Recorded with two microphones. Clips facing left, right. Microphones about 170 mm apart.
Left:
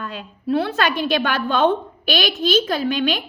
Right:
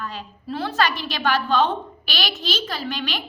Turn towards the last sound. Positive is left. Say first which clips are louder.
# left 8 dB
turn(degrees=50)  # may be behind; listen again after turning